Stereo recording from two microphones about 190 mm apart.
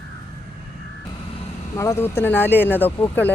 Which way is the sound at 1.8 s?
15° left (ahead or behind).